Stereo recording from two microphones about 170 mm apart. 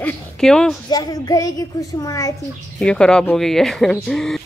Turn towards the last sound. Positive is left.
turn(degrees=5)  # may be behind; listen again after turning